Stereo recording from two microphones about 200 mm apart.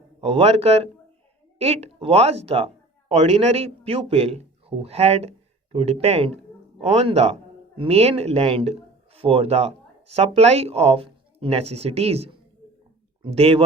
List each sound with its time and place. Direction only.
0.2 s speech: 30° right (ahead or behind)